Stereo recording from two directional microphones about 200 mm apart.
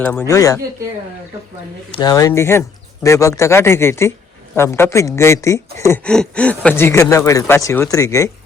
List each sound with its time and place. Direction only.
0.0 s speech: 5° left (ahead or behind)
0.3 s speech: 15° left (ahead or behind)
1.9 s speech: 20° left (ahead or behind)